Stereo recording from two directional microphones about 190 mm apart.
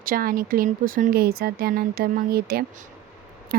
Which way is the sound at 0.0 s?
50° right (ahead or behind).